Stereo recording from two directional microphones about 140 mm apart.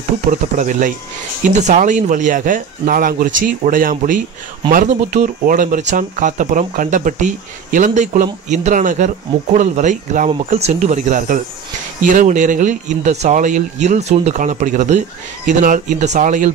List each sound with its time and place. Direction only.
0.3 s speech: 65° right (ahead or behind)
4.6 s speech: 60° right (ahead or behind)